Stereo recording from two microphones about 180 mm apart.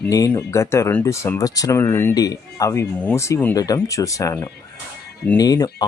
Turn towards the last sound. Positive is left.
turn(degrees=20)  # may be behind; listen again after turning